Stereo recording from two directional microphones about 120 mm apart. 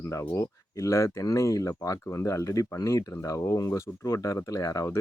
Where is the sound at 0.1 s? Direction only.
25° left (ahead or behind).